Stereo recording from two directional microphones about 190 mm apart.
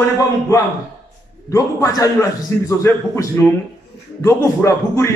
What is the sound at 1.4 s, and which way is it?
A man's voice, 20° left (ahead or behind).